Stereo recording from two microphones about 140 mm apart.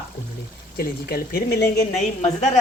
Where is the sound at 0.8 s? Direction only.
90° left.